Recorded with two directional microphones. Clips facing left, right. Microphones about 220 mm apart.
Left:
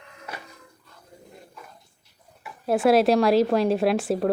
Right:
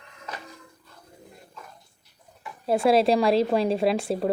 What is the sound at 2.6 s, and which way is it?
A woman's voice, 5° left (ahead or behind).